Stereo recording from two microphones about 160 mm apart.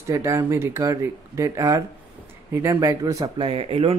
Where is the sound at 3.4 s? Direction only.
35° right (ahead or behind).